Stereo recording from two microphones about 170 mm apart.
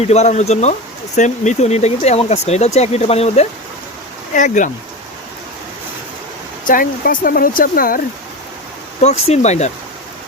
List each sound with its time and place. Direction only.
0.0 s speech: 40° left (ahead or behind)
4.4 s speech: 50° left (ahead or behind)
6.7 s speech: 55° left (ahead or behind)
9.0 s speech: 40° left (ahead or behind)